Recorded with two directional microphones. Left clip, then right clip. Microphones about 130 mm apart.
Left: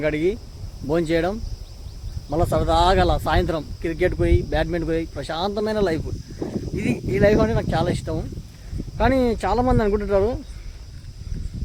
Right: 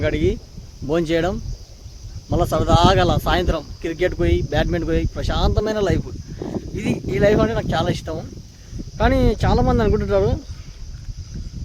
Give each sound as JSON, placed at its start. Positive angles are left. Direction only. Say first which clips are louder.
{"t": 0.0, "sound": "speech", "louder": "right 1 dB", "side_deg": -25}